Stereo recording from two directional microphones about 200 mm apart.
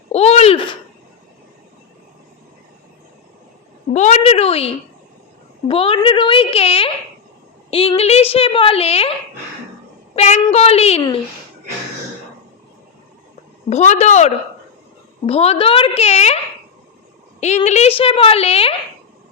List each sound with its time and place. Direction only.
0.1 s a sound: 30° left (ahead or behind)
3.9 s a woman's voice: 35° left (ahead or behind)
10.2 s a child's voice: 35° left (ahead or behind)
13.7 s a child's voice: 35° left (ahead or behind)
17.4 s a woman's voice: 35° left (ahead or behind)